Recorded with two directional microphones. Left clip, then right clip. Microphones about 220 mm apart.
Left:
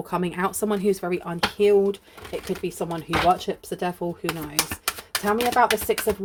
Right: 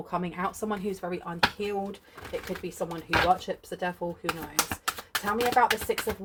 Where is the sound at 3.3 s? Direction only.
55° left (ahead or behind).